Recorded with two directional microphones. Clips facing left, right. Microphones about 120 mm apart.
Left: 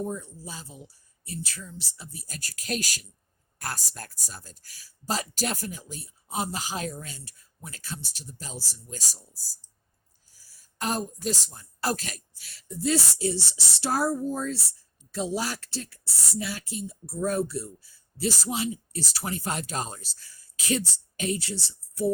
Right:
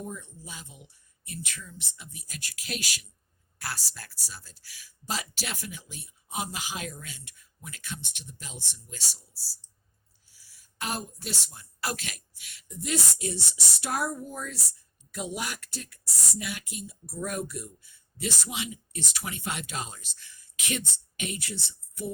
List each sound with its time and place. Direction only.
0.0 s speech: 35° left (ahead or behind)